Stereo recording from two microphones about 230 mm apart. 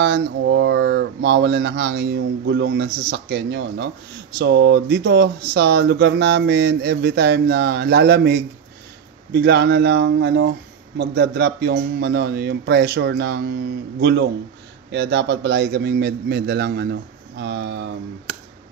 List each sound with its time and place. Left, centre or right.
0.0 s speech: right